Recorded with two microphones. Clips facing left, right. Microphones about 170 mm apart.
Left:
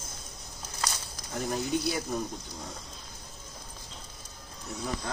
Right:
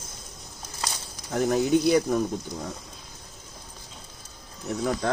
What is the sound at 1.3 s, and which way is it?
Speech, 90° right.